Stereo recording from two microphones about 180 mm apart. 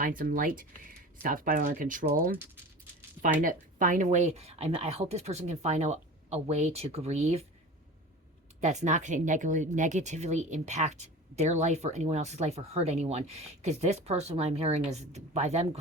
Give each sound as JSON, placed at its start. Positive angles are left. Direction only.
{"t": 0.0, "sound": "speech", "side_deg": -50}
{"t": 3.4, "sound": "speech", "side_deg": -50}
{"t": 8.6, "sound": "speech", "side_deg": -40}